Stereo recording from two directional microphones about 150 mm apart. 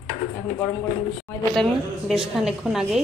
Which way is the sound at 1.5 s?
5° left (ahead or behind).